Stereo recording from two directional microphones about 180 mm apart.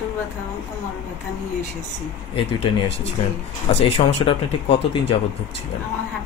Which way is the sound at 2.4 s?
35° left (ahead or behind).